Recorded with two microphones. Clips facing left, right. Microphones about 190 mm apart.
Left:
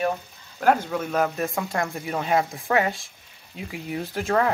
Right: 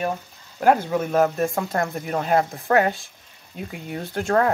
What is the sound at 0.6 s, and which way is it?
Speech, 10° right (ahead or behind).